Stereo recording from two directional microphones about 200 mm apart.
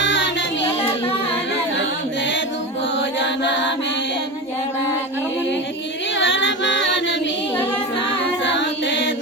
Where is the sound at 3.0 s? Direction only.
65° left (ahead or behind).